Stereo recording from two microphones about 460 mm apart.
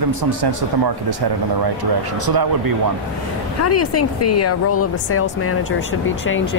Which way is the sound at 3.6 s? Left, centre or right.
Left.